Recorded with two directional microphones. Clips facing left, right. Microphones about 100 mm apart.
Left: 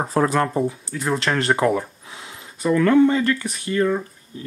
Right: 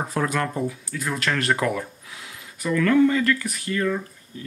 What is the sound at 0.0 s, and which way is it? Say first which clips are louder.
Speech: left 5 dB; 35° left (ahead or behind).